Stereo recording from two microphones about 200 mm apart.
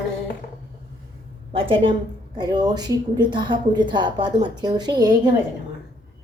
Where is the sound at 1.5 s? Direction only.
25° right (ahead or behind).